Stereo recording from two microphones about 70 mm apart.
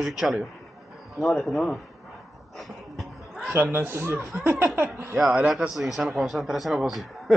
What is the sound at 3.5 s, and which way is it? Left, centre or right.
Speech, right.